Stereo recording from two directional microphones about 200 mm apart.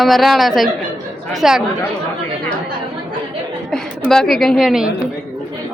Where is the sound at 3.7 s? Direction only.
Centre (ahead or behind).